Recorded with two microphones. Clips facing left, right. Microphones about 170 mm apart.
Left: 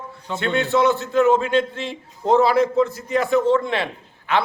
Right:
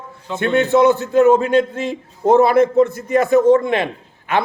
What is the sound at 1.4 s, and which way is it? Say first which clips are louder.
A man's voice: right 5 dB; 45° right (ahead or behind).